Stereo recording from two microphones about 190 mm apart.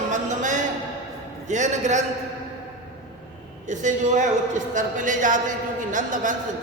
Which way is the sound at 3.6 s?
40° right (ahead or behind).